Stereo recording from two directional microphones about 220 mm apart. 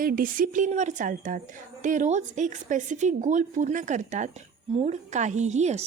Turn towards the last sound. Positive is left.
turn(degrees=-30)  # may be behind; listen again after turning